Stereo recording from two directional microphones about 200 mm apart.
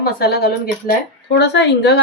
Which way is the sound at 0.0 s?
50° left (ahead or behind).